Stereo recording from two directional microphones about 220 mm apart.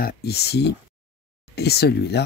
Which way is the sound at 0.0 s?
45° left (ahead or behind).